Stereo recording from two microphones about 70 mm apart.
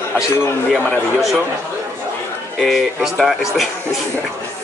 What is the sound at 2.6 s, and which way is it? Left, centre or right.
Speech, centre.